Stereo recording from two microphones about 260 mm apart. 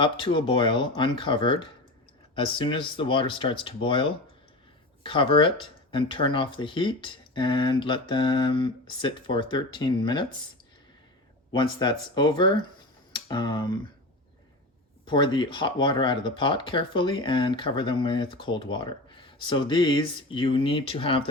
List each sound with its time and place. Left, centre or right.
0.0 s speech: centre
11.5 s speech: centre
15.0 s speech: centre